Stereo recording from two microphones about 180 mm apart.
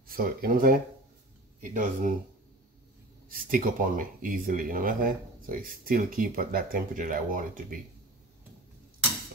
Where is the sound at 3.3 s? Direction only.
50° right (ahead or behind).